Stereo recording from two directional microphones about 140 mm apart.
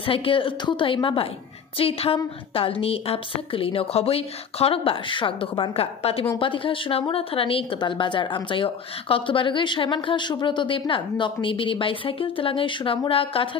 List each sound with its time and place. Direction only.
0.0 s a woman's voice: 40° left (ahead or behind)